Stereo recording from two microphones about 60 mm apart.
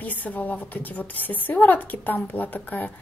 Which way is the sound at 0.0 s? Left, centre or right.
Left.